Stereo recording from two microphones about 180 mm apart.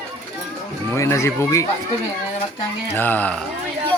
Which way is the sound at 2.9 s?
10° left (ahead or behind).